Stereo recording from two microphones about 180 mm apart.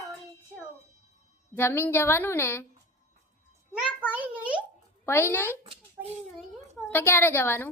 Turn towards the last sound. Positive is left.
turn(degrees=10)  # may be behind; listen again after turning